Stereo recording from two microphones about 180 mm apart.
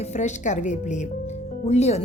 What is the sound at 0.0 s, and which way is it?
Speech, 40° left (ahead or behind).